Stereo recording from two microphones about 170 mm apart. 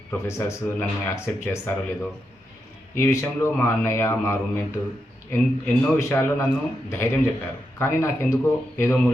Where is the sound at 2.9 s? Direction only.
15° left (ahead or behind).